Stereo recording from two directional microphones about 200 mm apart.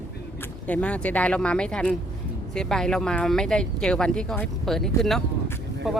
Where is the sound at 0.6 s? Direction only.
5° left (ahead or behind).